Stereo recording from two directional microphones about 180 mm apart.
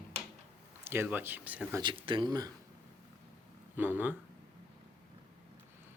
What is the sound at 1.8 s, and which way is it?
Speech, 30° right (ahead or behind).